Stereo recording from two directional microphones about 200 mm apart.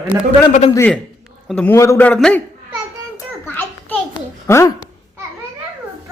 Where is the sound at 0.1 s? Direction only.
15° right (ahead or behind).